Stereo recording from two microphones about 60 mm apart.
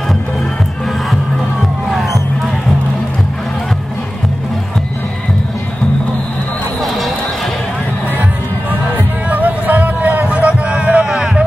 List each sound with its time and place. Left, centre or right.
1.9 s music: centre
9.3 s a sound: right
11.1 s music: centre